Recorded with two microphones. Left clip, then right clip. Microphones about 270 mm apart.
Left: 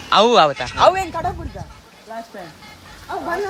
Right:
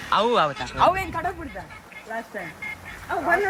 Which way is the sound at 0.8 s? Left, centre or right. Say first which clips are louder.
Left 5 dB; left.